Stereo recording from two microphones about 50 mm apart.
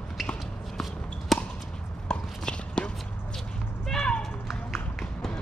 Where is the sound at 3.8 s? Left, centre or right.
Centre.